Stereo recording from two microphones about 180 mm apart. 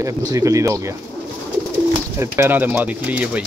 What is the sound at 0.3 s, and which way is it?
Speech, 15° right (ahead or behind).